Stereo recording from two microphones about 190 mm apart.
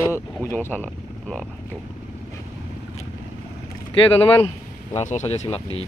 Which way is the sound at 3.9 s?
25° left (ahead or behind).